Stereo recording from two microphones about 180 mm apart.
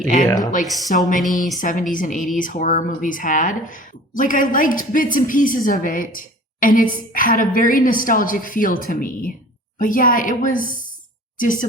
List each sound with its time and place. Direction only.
0.6 s a woman's voice: centre (ahead or behind)
0.9 s a woman's voice: 45° left (ahead or behind)